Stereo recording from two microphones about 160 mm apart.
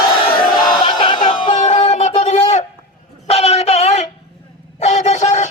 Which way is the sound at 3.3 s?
40° left (ahead or behind).